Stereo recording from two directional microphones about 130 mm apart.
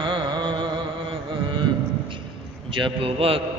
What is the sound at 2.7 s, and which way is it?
Speech, 40° right (ahead or behind).